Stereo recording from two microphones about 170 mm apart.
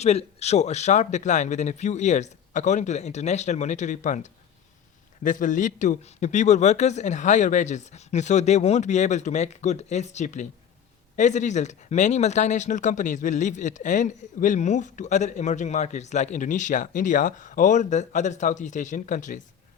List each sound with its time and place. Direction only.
0.0 s speech: 40° left (ahead or behind)